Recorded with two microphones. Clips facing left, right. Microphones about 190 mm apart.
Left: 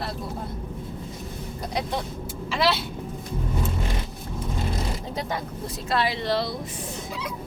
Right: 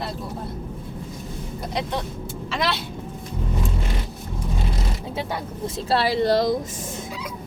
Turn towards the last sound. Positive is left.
turn(degrees=-45)  # may be behind; listen again after turning